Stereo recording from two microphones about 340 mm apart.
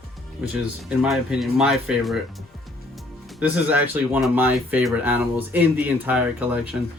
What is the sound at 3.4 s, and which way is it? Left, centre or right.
Speech, centre.